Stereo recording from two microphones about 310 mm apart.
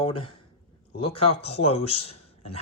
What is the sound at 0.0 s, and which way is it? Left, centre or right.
Speech, centre.